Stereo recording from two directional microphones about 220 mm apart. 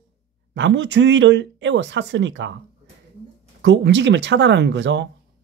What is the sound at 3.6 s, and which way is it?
Speech, 55° right (ahead or behind).